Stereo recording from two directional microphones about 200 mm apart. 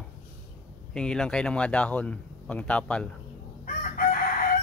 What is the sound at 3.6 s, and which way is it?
Chicken, 40° left (ahead or behind).